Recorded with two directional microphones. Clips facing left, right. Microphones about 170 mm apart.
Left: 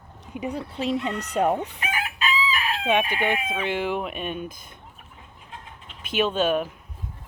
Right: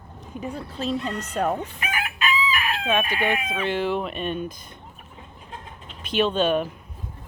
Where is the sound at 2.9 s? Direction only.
15° left (ahead or behind).